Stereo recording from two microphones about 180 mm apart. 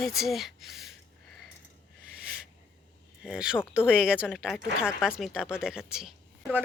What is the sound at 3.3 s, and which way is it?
Speech, 5° right (ahead or behind).